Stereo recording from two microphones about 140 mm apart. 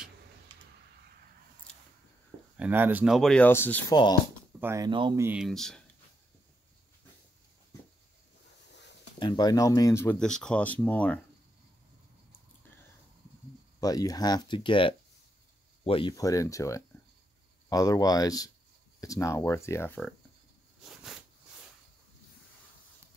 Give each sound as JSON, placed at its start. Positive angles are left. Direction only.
{"t": 2.5, "sound": "speech", "side_deg": -10}
{"t": 3.2, "sound": "speech", "side_deg": 5}
{"t": 3.4, "sound": "speech", "side_deg": 15}
{"t": 3.9, "sound": "speech", "side_deg": 30}
{"t": 4.6, "sound": "speech", "side_deg": -15}
{"t": 4.8, "sound": "speech", "side_deg": -35}
{"t": 5.3, "sound": "speech", "side_deg": 0}
{"t": 9.2, "sound": "speech", "side_deg": 30}
{"t": 10.1, "sound": "speech", "side_deg": 5}
{"t": 13.7, "sound": "speech", "side_deg": 25}
{"t": 16.2, "sound": "speech", "side_deg": 25}